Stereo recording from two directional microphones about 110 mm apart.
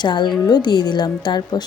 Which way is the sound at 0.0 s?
45° left (ahead or behind).